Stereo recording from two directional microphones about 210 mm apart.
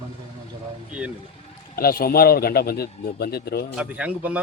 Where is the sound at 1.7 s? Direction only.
45° left (ahead or behind).